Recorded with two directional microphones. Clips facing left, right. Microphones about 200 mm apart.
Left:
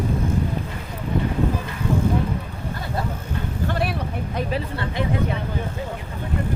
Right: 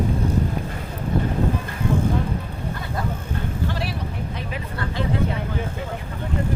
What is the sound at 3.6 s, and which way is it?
Vehicle, 55° left (ahead or behind).